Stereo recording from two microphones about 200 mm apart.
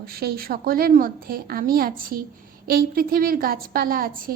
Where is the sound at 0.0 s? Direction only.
50° right (ahead or behind).